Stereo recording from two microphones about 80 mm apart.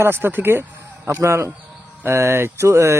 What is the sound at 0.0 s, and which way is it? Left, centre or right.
Speech, right.